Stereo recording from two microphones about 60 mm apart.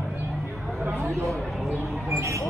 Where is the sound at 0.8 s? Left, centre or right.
Right.